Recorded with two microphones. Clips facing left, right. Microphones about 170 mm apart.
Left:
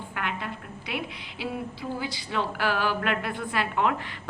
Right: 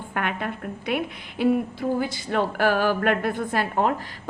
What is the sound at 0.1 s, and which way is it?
A woman's voice, 55° right (ahead or behind).